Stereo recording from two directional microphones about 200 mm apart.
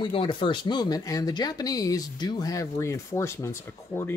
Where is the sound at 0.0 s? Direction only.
25° left (ahead or behind).